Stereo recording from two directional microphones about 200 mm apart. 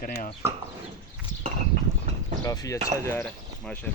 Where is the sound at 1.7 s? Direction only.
40° right (ahead or behind).